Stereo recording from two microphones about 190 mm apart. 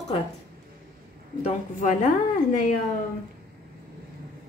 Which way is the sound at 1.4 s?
40° left (ahead or behind).